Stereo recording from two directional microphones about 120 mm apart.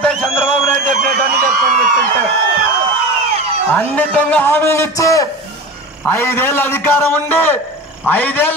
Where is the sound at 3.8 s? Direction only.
10° left (ahead or behind).